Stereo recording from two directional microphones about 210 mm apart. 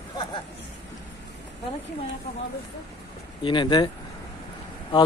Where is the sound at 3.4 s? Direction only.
20° left (ahead or behind).